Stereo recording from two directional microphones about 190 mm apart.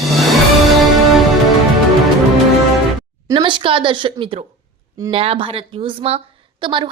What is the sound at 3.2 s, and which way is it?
A woman's voice, 25° right (ahead or behind).